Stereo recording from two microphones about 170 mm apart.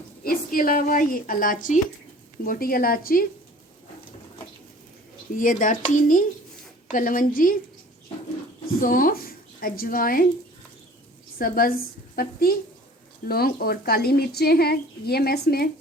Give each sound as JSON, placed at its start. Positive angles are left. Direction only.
{"t": 0.3, "sound": "speech", "side_deg": 55}
{"t": 5.4, "sound": "speech", "side_deg": 50}
{"t": 8.8, "sound": "a woman's voice", "side_deg": 55}
{"t": 11.3, "sound": "speech", "side_deg": 55}